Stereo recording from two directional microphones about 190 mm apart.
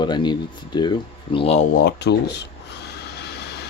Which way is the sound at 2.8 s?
60° left (ahead or behind).